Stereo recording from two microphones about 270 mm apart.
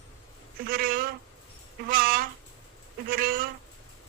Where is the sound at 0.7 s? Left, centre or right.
Right.